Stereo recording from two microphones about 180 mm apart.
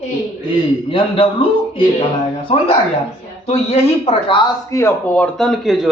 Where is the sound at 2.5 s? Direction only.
40° left (ahead or behind).